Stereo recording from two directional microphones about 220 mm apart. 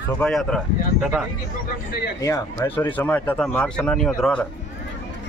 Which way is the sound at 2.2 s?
10° left (ahead or behind).